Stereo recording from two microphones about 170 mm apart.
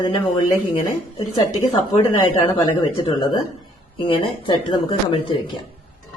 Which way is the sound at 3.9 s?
30° left (ahead or behind).